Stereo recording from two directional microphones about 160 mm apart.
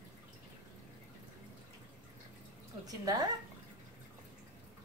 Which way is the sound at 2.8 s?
25° right (ahead or behind).